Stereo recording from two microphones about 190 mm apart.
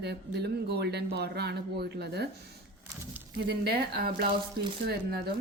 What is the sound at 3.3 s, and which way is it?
Speech, 55° right (ahead or behind).